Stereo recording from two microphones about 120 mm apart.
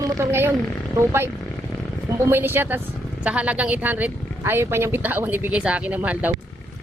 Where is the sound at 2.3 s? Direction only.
20° right (ahead or behind).